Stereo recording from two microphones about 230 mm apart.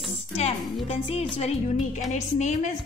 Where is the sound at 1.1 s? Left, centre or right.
Left.